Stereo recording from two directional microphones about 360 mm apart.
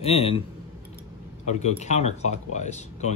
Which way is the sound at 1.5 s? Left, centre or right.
Centre.